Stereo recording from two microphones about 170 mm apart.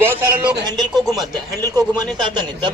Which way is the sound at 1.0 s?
20° right (ahead or behind).